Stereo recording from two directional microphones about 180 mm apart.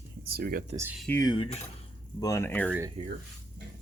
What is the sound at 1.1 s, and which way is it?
Speech, 20° left (ahead or behind).